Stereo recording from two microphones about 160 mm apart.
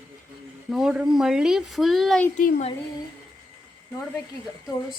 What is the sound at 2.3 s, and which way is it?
Speech, 45° left (ahead or behind).